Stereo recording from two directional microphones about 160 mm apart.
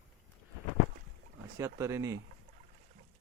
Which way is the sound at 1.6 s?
20° right (ahead or behind).